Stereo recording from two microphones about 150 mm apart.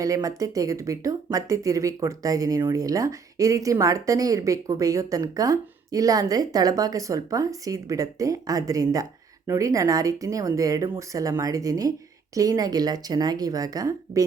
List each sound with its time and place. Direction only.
0.0 s speech: 25° right (ahead or behind)